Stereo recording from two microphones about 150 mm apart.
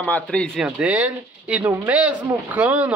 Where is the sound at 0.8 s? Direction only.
10° right (ahead or behind).